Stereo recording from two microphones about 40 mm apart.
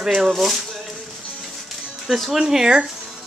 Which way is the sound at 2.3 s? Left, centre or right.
Centre.